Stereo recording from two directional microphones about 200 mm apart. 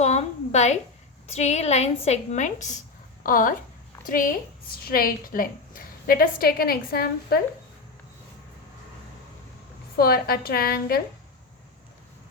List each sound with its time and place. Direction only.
0.0 s a sound: 35° left (ahead or behind)
1.3 s a woman's voice: 35° left (ahead or behind); by 7.4 s 50° left (ahead or behind)
10.0 s a woman's voice: 50° left (ahead or behind)